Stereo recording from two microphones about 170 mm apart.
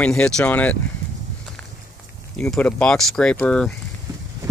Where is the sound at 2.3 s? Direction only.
5° left (ahead or behind).